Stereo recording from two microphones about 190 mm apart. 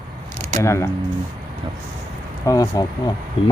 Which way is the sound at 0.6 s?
15° left (ahead or behind).